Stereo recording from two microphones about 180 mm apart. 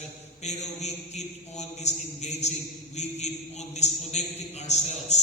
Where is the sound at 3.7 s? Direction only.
40° left (ahead or behind).